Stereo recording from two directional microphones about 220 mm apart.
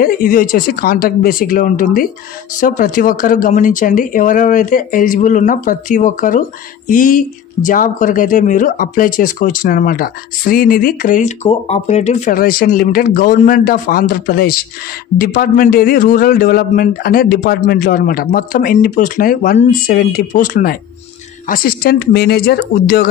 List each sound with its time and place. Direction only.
0.0 s speech: 40° left (ahead or behind)